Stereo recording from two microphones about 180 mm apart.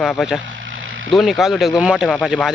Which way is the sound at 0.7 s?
90° right.